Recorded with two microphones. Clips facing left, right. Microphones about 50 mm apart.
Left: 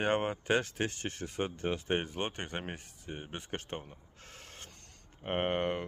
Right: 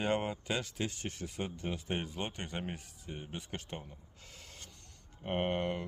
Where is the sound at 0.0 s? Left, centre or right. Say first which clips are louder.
Left 3 dB; left.